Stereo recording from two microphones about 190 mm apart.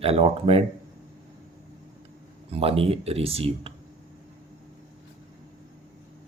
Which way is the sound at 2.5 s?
30° right (ahead or behind).